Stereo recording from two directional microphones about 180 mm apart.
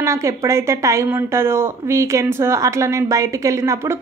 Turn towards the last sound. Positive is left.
turn(degrees=-15)  # may be behind; listen again after turning